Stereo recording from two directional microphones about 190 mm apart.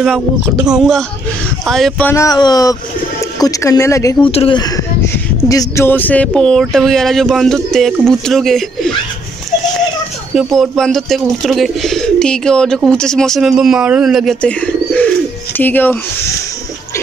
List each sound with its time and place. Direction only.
0.7 s speech: centre (ahead or behind); by 4.3 s 15° left (ahead or behind)
4.3 s speech: 30° left (ahead or behind); by 8.9 s centre (ahead or behind)
10.3 s speech: centre (ahead or behind)